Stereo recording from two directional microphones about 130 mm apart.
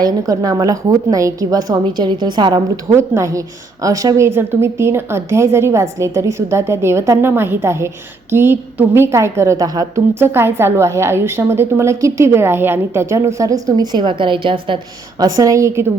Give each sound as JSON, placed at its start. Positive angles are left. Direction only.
{"t": 0.0, "sound": "a woman's voice", "side_deg": -30}
{"t": 2.9, "sound": "a woman's voice", "side_deg": -20}
{"t": 15.2, "sound": "a woman's voice", "side_deg": -25}